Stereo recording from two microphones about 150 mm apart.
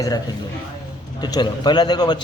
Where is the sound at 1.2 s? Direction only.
30° left (ahead or behind).